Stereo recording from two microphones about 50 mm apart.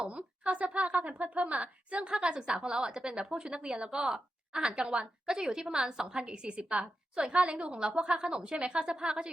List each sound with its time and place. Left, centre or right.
0.0 s a woman's voice: right